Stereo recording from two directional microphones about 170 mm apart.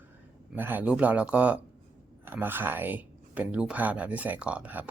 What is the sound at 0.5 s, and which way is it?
Speech, 10° right (ahead or behind).